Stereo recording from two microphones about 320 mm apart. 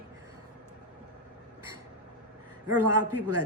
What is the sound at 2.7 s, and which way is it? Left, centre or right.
Speech, right.